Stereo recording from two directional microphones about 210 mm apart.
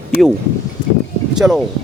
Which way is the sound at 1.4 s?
10° right (ahead or behind).